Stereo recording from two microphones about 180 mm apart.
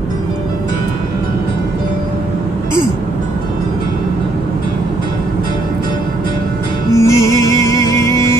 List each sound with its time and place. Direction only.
7.0 s music: 15° left (ahead or behind)